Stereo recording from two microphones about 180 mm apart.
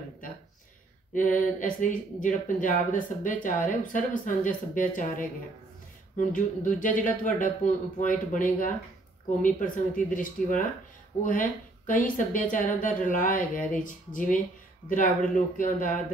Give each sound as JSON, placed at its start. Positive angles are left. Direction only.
{"t": 1.1, "sound": "speech", "side_deg": 45}